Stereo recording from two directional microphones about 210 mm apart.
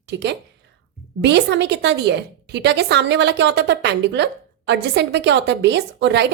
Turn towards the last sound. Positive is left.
turn(degrees=-55)  # may be behind; listen again after turning